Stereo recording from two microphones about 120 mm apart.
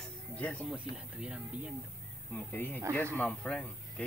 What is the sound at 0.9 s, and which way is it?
Speech, 10° right (ahead or behind).